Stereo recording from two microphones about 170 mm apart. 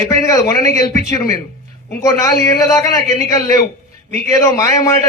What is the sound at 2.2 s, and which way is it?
Speech, 20° left (ahead or behind).